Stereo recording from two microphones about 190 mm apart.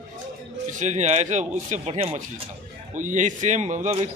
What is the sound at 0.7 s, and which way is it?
Speech, 40° right (ahead or behind).